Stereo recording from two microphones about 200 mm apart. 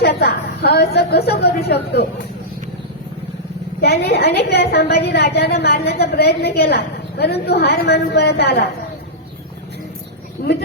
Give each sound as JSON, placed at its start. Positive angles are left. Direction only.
{"t": 0.0, "sound": "a woman's voice", "side_deg": 55}
{"t": 3.8, "sound": "a woman's voice", "side_deg": 55}
{"t": 10.4, "sound": "a sound", "side_deg": 55}